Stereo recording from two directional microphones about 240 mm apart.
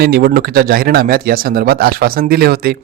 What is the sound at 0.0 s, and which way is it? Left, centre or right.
A man's voice, right.